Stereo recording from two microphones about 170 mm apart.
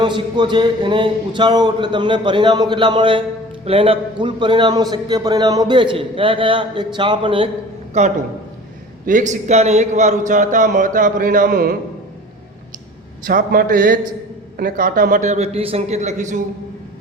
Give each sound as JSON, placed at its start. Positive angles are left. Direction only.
{"t": 0.0, "sound": "a man's voice", "side_deg": -25}
{"t": 13.2, "sound": "a man's voice", "side_deg": -55}